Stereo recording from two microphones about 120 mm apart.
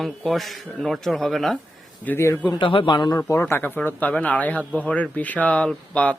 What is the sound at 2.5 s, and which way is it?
Speech, 45° left (ahead or behind).